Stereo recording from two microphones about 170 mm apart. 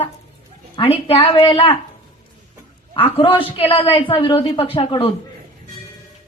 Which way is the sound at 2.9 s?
30° left (ahead or behind).